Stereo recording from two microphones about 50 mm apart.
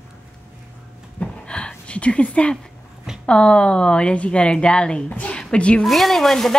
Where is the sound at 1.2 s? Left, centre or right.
Left.